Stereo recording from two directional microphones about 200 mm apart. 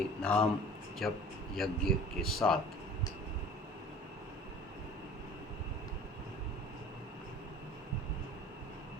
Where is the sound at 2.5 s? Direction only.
5° left (ahead or behind).